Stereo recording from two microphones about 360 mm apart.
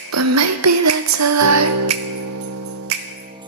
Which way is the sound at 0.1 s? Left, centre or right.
Right.